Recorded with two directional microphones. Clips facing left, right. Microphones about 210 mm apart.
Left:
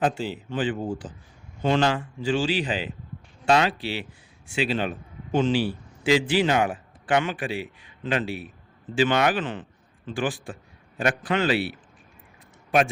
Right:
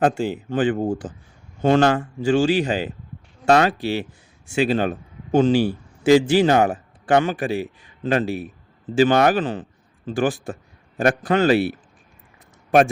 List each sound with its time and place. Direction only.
0.0 s a man's voice: 50° right (ahead or behind)